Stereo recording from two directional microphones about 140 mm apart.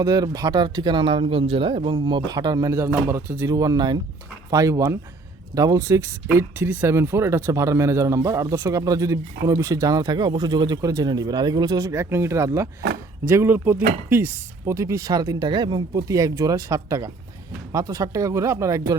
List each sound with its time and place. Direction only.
0.0 s speech: 25° right (ahead or behind)